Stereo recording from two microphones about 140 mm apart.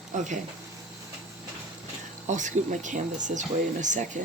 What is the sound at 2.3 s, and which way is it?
Speech, 60° right (ahead or behind).